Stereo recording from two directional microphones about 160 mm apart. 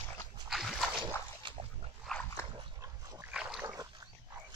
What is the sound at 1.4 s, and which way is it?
Dog, 30° right (ahead or behind).